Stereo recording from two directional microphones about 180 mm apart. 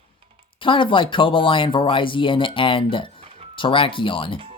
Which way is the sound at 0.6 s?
30° left (ahead or behind).